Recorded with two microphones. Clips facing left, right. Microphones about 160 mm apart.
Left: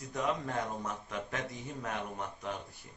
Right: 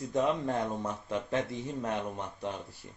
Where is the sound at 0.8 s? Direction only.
30° right (ahead or behind).